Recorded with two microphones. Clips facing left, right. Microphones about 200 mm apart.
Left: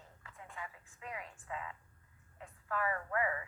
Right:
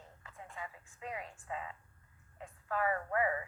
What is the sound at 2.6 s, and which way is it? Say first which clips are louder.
Speech: right 3 dB; 30° right (ahead or behind).